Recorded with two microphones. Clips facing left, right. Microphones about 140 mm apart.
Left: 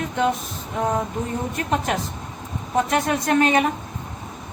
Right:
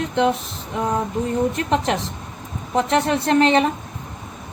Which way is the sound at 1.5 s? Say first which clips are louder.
Right 3 dB; 30° right (ahead or behind).